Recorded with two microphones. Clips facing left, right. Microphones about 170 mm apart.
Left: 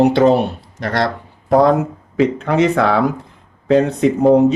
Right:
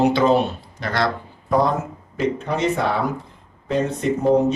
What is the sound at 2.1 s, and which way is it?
Speech, 90° left.